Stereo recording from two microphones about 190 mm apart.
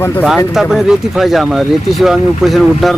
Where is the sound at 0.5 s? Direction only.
Centre (ahead or behind).